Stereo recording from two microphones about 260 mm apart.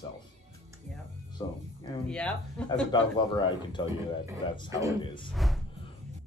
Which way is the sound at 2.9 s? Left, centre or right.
Centre.